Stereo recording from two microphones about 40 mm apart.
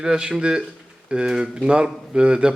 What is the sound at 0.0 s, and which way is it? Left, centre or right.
A man's voice, centre.